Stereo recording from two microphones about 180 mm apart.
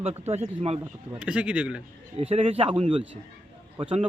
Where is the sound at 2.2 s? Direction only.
35° right (ahead or behind).